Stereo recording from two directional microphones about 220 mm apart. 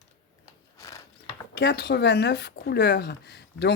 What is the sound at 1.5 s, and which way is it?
Speech, 50° left (ahead or behind).